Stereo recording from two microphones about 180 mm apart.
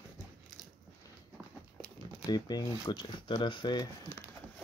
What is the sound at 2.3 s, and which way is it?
Speech, 25° left (ahead or behind).